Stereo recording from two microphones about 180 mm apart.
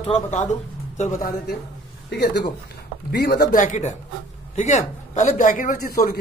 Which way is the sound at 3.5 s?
45° left (ahead or behind).